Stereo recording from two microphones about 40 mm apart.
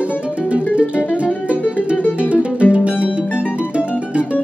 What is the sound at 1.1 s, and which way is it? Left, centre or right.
Music, right.